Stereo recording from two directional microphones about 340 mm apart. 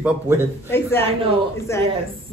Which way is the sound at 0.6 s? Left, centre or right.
Centre.